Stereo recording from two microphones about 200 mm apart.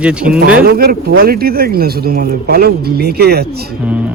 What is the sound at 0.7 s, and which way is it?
Speech, 50° right (ahead or behind).